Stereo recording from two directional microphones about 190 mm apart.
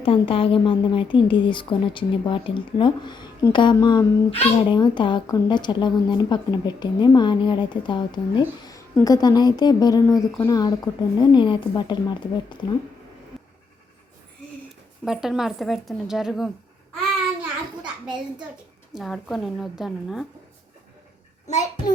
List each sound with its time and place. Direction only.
0.0 s a woman's voice: 30° left (ahead or behind)
13.3 s vehicle: centre (ahead or behind)
15.0 s a woman's voice: centre (ahead or behind)
18.9 s a woman's voice: centre (ahead or behind)
21.4 s a child's voice: 40° left (ahead or behind)